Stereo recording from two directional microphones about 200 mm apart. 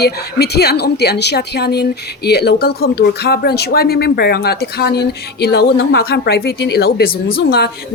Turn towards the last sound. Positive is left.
turn(degrees=55)  # may be behind; listen again after turning